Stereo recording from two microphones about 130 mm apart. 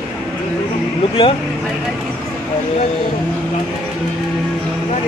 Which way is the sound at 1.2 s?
45° left (ahead or behind).